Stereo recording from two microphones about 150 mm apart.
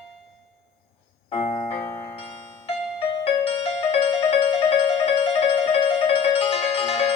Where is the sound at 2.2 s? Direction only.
40° left (ahead or behind).